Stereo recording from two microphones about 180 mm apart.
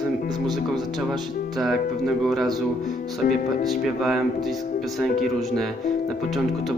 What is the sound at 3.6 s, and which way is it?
Speech, centre (ahead or behind).